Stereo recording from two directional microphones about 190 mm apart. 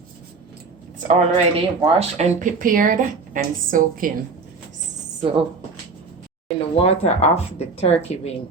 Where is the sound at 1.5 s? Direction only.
35° right (ahead or behind).